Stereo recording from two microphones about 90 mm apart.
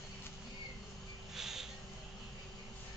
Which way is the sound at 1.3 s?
5° right (ahead or behind).